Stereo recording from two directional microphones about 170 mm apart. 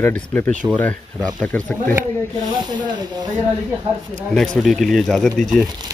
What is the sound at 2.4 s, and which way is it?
Speech, 25° right (ahead or behind).